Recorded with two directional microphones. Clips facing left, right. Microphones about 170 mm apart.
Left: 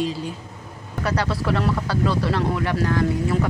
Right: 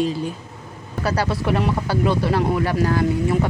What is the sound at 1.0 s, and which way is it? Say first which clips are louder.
Speech: right 2 dB; 30° right (ahead or behind).